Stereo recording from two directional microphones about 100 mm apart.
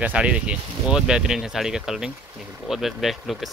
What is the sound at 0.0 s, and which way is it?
Speech, 10° right (ahead or behind).